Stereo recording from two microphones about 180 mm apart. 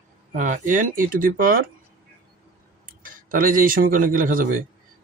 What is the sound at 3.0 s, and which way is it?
Speech, 50° right (ahead or behind).